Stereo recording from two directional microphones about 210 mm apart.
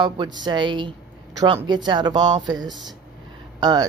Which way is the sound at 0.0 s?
20° right (ahead or behind).